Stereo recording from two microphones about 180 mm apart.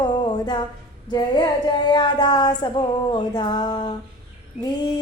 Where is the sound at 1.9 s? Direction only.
25° left (ahead or behind).